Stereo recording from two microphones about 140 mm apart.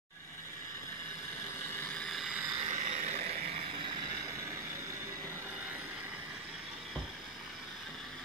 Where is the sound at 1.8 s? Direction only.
10° left (ahead or behind).